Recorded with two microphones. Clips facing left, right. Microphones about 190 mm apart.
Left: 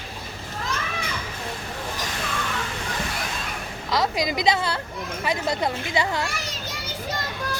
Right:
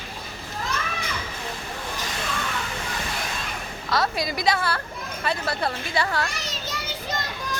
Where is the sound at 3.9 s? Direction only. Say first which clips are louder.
Left 1 dB; 15° left (ahead or behind).